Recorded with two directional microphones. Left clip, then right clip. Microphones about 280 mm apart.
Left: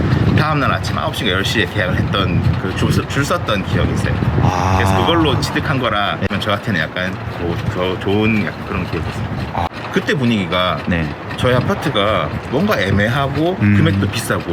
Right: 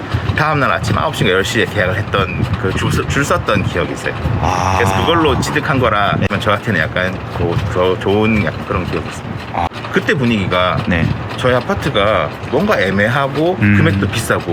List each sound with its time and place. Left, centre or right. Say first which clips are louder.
0.3 s speech: right 5 dB; centre
5.0 s speech: right 2 dB; centre
9.6 s speech: right 3 dB; centre